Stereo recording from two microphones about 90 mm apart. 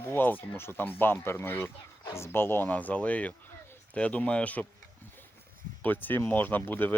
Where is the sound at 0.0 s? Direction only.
25° left (ahead or behind).